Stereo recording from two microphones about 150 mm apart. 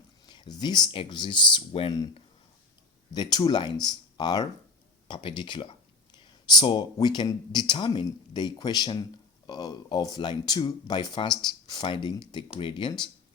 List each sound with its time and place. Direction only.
0.3 s speech: 30° left (ahead or behind)
3.2 s speech: 25° left (ahead or behind)